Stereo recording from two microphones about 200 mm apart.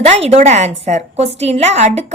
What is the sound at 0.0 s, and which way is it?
A woman's voice, 30° right (ahead or behind).